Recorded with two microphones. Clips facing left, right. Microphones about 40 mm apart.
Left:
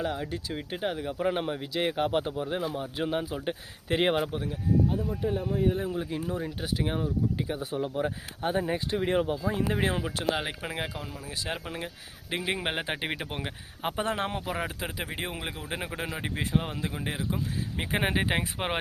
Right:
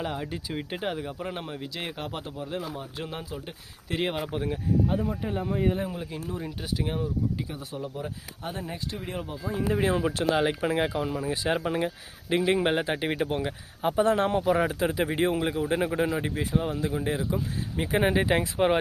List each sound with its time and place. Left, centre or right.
0.0 s speech: centre
1.3 s a man's voice: centre
4.4 s speech: right
5.6 s speech: right
6.0 s a man's voice: centre
8.0 s speech: left
10.2 s speech: centre
12.3 s a man's voice: centre
12.8 s speech: left
13.3 s speech: left
14.2 s a man's voice: centre
14.5 s a man's voice: centre
16.4 s speech: left
18.1 s speech: centre